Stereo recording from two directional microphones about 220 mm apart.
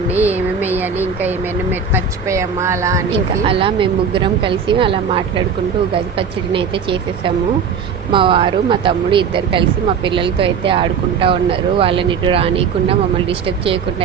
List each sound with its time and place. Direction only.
0.3 s a sound: 10° right (ahead or behind)
1.9 s a woman's voice: 15° right (ahead or behind)
3.1 s speech: 25° right (ahead or behind)
8.1 s speech: 25° right (ahead or behind)